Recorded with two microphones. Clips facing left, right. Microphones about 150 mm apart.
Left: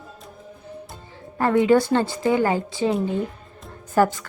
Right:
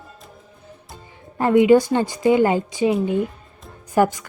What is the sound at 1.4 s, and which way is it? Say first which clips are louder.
A woman's voice: right 3 dB; 15° right (ahead or behind).